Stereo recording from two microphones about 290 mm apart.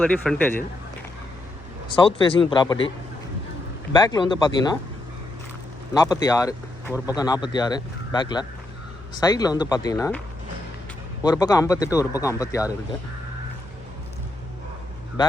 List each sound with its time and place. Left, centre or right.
0.0 s a man's voice: centre
1.9 s speech: centre
3.9 s speech: centre
5.9 s speech: centre
11.2 s speech: centre